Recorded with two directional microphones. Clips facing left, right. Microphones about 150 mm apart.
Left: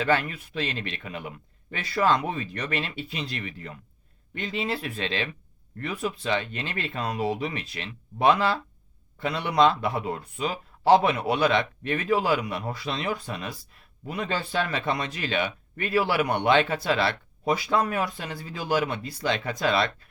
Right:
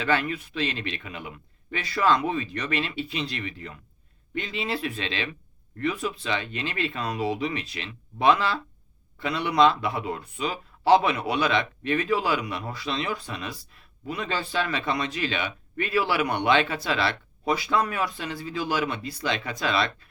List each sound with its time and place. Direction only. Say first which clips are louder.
0.0 s speech: left 1 dB; 40° left (ahead or behind)